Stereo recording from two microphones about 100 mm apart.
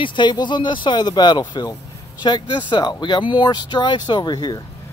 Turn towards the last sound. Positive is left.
turn(degrees=45)  # may be behind; listen again after turning